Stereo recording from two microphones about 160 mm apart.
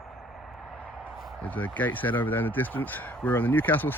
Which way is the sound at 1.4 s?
10° left (ahead or behind).